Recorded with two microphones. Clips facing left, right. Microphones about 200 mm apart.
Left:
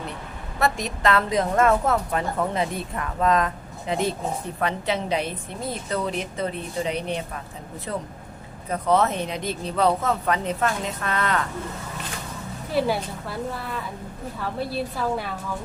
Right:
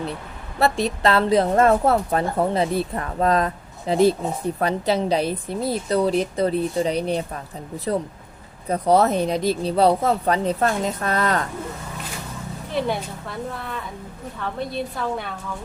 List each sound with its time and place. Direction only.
0.6 s a woman's voice: 30° right (ahead or behind)
8.7 s a woman's voice: 35° right (ahead or behind)
12.7 s a woman's voice: 5° left (ahead or behind)